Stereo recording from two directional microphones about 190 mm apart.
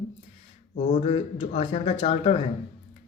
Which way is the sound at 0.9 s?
30° left (ahead or behind).